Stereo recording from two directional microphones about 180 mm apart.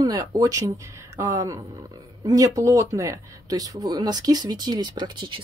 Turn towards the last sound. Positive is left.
turn(degrees=-25)  # may be behind; listen again after turning